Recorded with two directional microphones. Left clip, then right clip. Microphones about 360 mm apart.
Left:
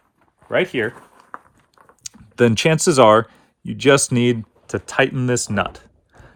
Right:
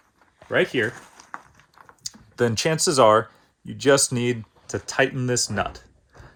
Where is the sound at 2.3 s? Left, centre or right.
Left.